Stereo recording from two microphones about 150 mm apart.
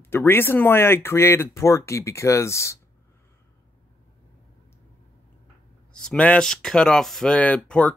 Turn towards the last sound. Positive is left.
turn(degrees=5)  # may be behind; listen again after turning